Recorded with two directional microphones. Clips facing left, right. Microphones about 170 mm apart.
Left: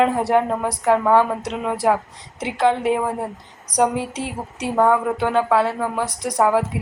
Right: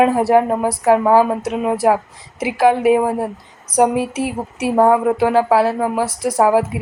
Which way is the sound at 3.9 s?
25° left (ahead or behind).